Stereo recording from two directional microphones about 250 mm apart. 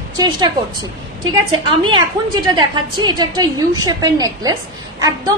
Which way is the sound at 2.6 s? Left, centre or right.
Centre.